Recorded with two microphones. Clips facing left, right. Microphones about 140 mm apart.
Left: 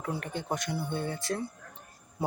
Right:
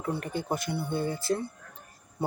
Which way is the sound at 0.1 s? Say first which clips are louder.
Right 3 dB; 5° right (ahead or behind).